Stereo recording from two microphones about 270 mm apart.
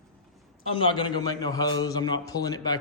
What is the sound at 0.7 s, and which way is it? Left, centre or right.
A man's voice, centre.